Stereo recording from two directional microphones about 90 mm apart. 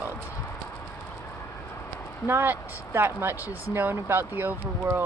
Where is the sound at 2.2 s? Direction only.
25° right (ahead or behind).